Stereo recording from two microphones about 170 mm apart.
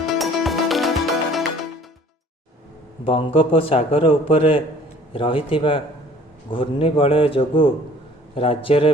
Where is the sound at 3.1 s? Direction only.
30° left (ahead or behind).